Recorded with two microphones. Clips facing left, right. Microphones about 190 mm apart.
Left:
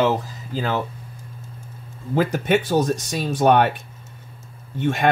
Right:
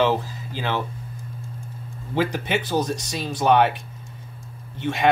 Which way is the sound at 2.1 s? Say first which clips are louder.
Left 4 dB; 50° left (ahead or behind).